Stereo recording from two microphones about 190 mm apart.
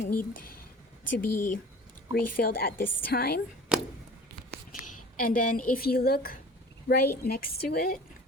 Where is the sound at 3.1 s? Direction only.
55° left (ahead or behind).